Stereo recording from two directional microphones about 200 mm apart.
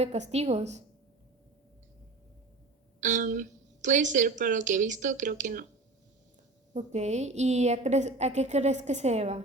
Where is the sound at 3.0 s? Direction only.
40° right (ahead or behind).